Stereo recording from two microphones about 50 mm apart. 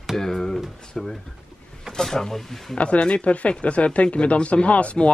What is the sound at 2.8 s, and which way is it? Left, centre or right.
Speech, left.